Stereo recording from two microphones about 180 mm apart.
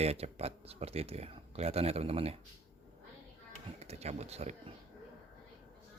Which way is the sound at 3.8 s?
35° right (ahead or behind).